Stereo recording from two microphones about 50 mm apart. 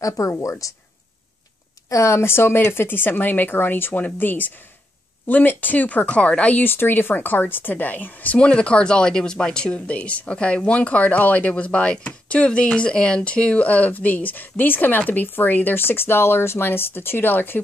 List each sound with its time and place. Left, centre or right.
0.0 s speech: left
1.9 s speech: left
2.2 s a woman's voice: left
6.6 s a woman's voice: left
8.4 s speech: left